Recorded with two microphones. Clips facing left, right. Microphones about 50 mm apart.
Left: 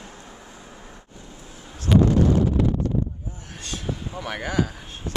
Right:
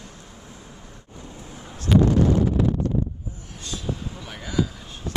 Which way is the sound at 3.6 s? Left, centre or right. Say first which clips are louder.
Even; left.